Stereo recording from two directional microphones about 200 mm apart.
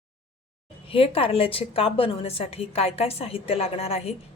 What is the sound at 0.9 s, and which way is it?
A woman's voice, 25° left (ahead or behind).